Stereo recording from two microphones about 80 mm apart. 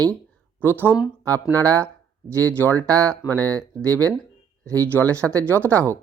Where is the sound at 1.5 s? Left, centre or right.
Right.